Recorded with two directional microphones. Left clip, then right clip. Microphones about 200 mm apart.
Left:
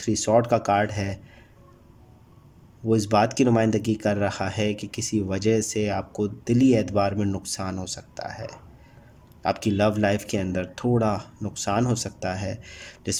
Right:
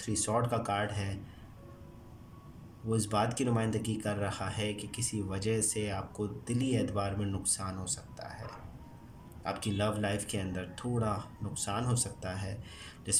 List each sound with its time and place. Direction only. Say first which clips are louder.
0.0 s speech: left 11 dB; 45° left (ahead or behind)
2.9 s speech: left 11 dB; 45° left (ahead or behind)